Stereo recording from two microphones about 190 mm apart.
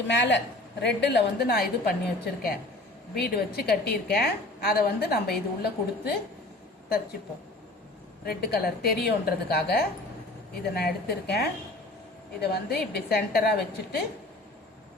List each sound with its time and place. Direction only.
0.1 s a woman's voice: 65° left (ahead or behind)
3.2 s a woman's voice: 55° left (ahead or behind)
8.2 s a woman's voice: 55° left (ahead or behind)